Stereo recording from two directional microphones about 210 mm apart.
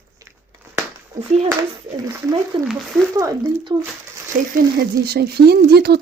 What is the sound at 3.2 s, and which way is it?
Speech, 15° right (ahead or behind).